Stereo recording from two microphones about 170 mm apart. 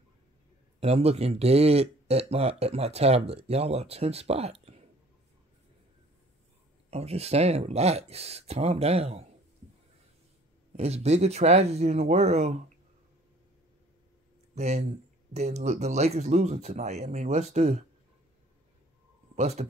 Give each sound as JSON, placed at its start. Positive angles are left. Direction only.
{"t": 0.7, "sound": "speech", "side_deg": -35}
{"t": 6.9, "sound": "speech", "side_deg": -40}
{"t": 10.8, "sound": "speech", "side_deg": -40}
{"t": 14.5, "sound": "speech", "side_deg": -40}
{"t": 19.3, "sound": "speech", "side_deg": -40}